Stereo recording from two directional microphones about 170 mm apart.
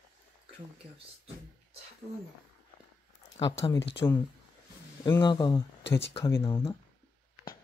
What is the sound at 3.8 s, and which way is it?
Speech, 90° left.